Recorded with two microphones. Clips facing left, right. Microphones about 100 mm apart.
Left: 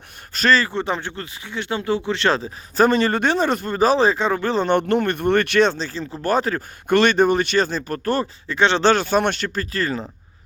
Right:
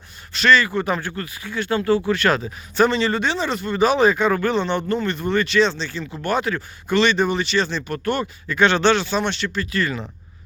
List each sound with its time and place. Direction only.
0.3 s speech: 40° left (ahead or behind)
2.8 s speech: 50° left (ahead or behind); by 4.6 s 30° left (ahead or behind)
4.6 s speech: 55° left (ahead or behind); by 6.6 s 40° left (ahead or behind)
6.8 s speech: 50° left (ahead or behind); by 8.8 s 25° left (ahead or behind)
8.8 s speech: 45° left (ahead or behind)